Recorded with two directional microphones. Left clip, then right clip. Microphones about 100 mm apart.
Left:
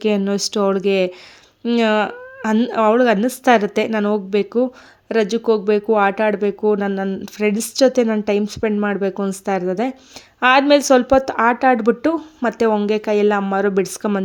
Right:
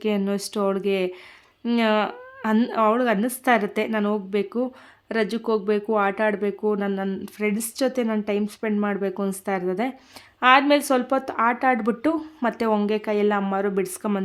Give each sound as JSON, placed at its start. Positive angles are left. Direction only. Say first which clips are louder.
{"t": 0.3, "sound": "speech", "louder": "left 6 dB", "side_deg": 45}
{"t": 10.4, "sound": "speech", "louder": "left 4 dB", "side_deg": 50}